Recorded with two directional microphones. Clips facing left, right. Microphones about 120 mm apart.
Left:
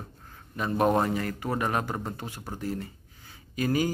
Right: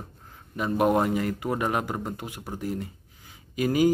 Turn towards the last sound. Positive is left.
turn(degrees=-15)  # may be behind; listen again after turning